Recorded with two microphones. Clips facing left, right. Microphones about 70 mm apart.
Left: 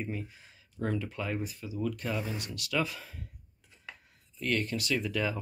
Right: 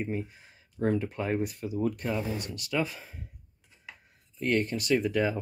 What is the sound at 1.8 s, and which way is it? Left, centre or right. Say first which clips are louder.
Speech: right 4 dB; right.